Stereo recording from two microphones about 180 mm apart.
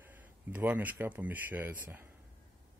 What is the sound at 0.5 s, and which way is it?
Speech, 10° right (ahead or behind).